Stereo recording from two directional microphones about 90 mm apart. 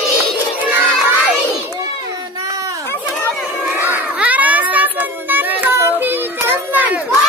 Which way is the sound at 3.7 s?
20° right (ahead or behind).